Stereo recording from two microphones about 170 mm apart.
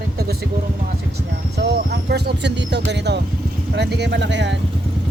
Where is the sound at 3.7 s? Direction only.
85° right.